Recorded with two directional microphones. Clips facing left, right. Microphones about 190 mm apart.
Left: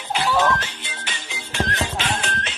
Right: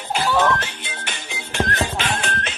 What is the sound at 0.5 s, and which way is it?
Music, 55° right (ahead or behind).